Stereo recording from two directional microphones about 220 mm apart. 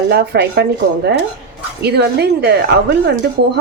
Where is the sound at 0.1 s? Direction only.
45° right (ahead or behind).